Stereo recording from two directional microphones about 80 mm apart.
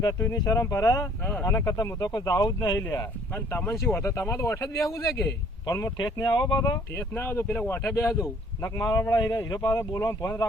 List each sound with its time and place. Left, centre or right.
0.3 s speech: left
1.2 s speech: left
3.6 s speech: left
4.0 s speech: left
6.0 s speech: left
6.9 s speech: left
7.9 s speech: left
9.0 s speech: left
9.6 s speech: left
9.9 s speech: left